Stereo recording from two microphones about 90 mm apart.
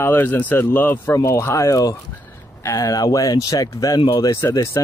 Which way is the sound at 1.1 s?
35° left (ahead or behind).